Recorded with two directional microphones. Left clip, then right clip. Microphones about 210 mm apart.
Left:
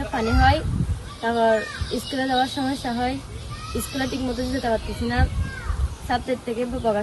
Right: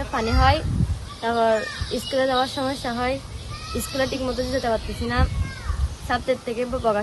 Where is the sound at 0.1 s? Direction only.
Centre (ahead or behind).